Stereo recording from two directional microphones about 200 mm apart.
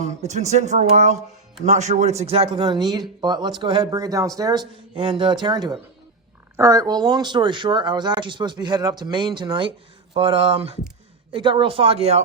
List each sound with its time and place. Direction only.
0.0 s speech: 35° right (ahead or behind)